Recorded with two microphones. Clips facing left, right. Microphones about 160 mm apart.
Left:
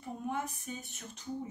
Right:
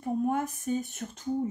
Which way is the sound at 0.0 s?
50° right (ahead or behind).